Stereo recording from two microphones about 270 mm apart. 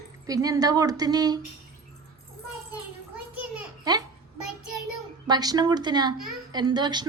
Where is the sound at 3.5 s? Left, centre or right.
Centre.